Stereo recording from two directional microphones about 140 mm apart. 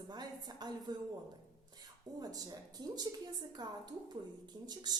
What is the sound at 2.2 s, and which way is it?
A woman's voice, 25° right (ahead or behind).